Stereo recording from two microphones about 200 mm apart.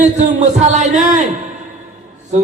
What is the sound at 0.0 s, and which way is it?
Speech, 35° right (ahead or behind).